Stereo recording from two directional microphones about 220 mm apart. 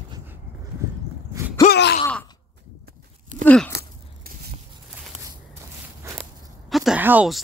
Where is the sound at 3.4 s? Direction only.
5° left (ahead or behind).